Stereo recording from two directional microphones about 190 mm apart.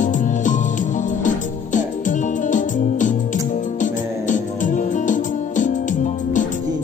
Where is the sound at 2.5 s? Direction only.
40° left (ahead or behind).